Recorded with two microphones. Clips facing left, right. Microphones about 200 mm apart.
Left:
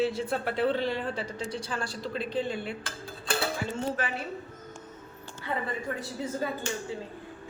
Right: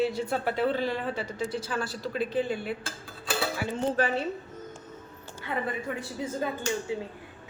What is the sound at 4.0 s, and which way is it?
Speech, 40° right (ahead or behind).